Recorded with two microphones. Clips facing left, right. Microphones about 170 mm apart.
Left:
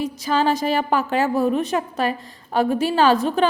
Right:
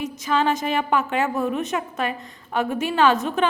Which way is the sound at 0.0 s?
35° left (ahead or behind).